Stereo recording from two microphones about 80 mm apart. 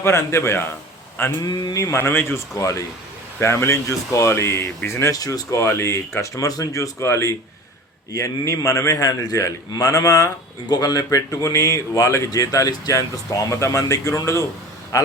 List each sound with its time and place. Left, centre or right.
0.0 s speech: left
1.4 s speech: left
2.6 s speech: left
5.1 s speech: left